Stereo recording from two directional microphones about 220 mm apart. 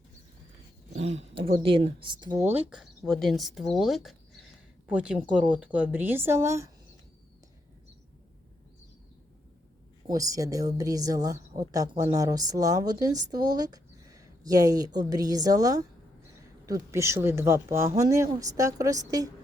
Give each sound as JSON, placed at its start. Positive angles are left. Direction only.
{"t": 0.9, "sound": "speech", "side_deg": -30}
{"t": 2.5, "sound": "a woman's voice", "side_deg": -5}
{"t": 10.1, "sound": "a woman's voice", "side_deg": -15}